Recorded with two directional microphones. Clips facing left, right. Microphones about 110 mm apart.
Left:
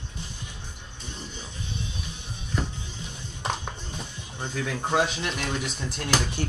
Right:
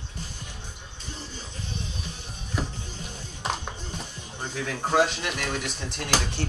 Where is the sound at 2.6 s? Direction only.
5° right (ahead or behind).